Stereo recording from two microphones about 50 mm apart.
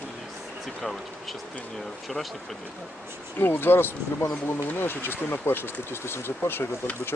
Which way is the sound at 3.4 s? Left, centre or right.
Left.